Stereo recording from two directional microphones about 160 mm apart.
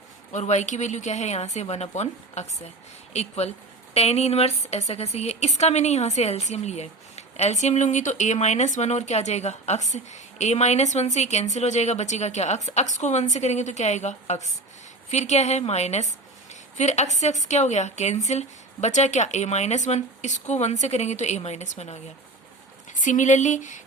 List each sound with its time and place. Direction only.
0.3 s a woman's voice: 45° left (ahead or behind)